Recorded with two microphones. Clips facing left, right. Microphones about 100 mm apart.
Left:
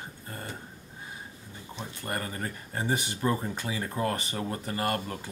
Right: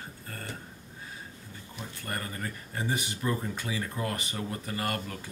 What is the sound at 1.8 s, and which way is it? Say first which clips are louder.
Speech: left 3 dB; 25° left (ahead or behind).